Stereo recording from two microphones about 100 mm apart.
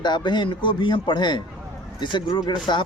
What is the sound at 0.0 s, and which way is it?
Speech, 50° left (ahead or behind).